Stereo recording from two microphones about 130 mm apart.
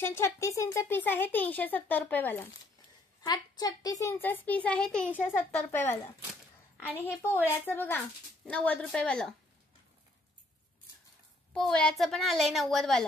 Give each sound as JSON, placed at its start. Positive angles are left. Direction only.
{"t": 0.0, "sound": "speech", "side_deg": 20}
{"t": 3.2, "sound": "a woman's voice", "side_deg": 30}
{"t": 4.2, "sound": "speech", "side_deg": 15}
{"t": 7.2, "sound": "speech", "side_deg": 15}
{"t": 11.5, "sound": "a woman's voice", "side_deg": 5}